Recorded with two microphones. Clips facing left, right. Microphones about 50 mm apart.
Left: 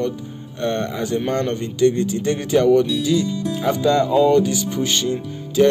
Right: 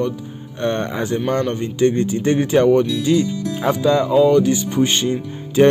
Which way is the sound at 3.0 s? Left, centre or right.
Right.